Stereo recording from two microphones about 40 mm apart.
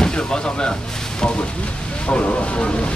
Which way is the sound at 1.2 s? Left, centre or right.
Left.